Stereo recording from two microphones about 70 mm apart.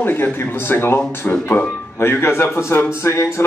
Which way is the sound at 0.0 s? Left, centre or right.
Left.